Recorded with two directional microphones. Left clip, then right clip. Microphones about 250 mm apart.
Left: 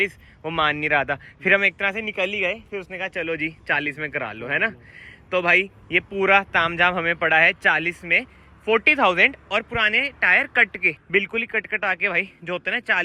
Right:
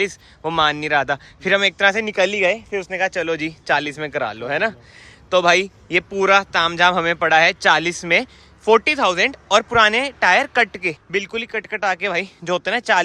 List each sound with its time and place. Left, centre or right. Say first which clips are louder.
0.0 s speech: right 2 dB; centre
9.5 s speech: right 7 dB; right